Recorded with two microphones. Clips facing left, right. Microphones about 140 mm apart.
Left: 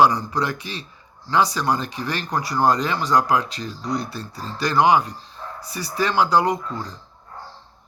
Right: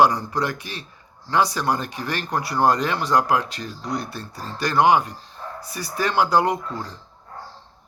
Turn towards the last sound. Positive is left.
turn(degrees=-55)  # may be behind; listen again after turning